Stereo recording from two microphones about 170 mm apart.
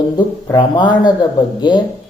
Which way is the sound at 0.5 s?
25° left (ahead or behind).